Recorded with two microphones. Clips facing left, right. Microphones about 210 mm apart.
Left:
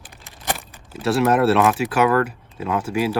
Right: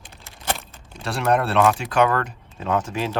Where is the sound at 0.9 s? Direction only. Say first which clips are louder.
Left 4 dB; 5° left (ahead or behind).